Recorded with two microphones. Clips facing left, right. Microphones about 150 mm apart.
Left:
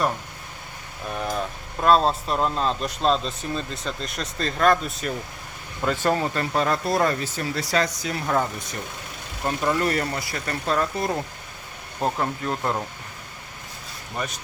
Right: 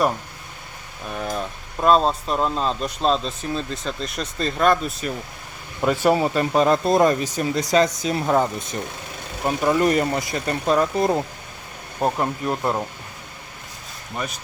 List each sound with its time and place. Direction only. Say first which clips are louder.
1.8 s speech: right 1 dB; centre (ahead or behind)
5.8 s speech: right 4 dB; 10° right (ahead or behind)